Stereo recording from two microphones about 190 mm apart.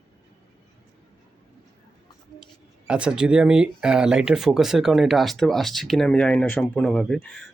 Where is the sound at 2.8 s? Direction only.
5° right (ahead or behind).